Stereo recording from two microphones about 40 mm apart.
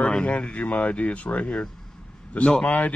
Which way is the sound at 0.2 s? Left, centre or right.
Left.